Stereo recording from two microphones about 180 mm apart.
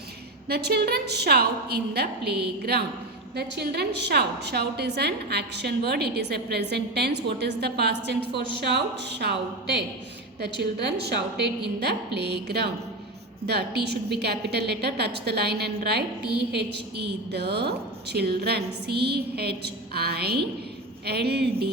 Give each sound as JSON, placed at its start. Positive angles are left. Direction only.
{"t": 0.4, "sound": "a woman's voice", "side_deg": -60}